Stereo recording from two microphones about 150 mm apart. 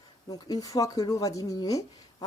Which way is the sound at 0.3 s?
25° left (ahead or behind).